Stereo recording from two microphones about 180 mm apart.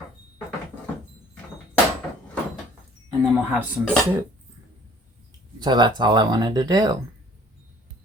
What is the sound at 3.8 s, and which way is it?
Speech, 10° right (ahead or behind).